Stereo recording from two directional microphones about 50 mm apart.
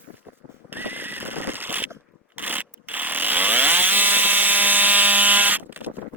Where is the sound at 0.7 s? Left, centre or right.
Right.